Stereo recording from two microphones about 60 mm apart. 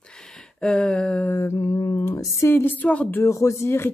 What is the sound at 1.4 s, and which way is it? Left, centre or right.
Speech, left.